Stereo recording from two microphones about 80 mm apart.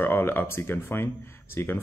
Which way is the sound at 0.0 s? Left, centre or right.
Left.